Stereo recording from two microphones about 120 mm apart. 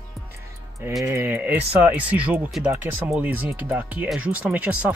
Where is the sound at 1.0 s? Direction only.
20° right (ahead or behind).